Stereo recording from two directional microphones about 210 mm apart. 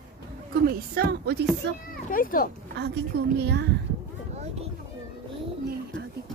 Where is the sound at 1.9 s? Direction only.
40° left (ahead or behind).